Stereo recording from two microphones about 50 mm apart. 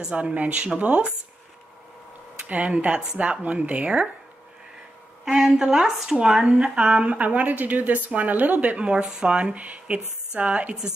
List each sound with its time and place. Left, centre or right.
0.0 s a woman's voice: right
2.4 s a woman's voice: right
5.2 s a woman's voice: centre